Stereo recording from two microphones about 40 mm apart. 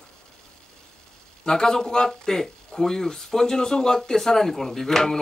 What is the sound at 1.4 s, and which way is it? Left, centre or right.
Speech, centre.